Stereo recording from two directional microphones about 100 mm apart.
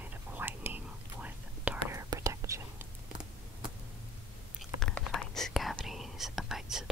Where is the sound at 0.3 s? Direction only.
20° right (ahead or behind).